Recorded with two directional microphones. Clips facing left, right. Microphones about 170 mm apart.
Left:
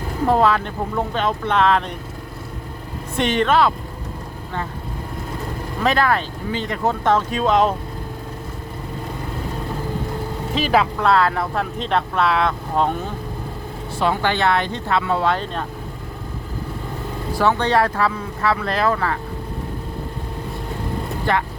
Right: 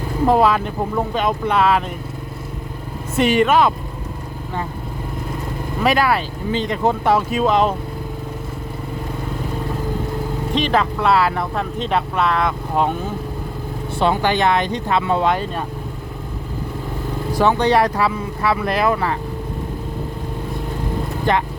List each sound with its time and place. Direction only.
0.3 s speech: 15° right (ahead or behind)
3.2 s speech: 10° right (ahead or behind)
5.8 s speech: 10° right (ahead or behind)
10.5 s speech: 5° left (ahead or behind)
11.0 s speech: 5° right (ahead or behind)
14.0 s speech: 20° right (ahead or behind)
17.3 s speech: 15° right (ahead or behind)
21.3 s speech: 20° right (ahead or behind)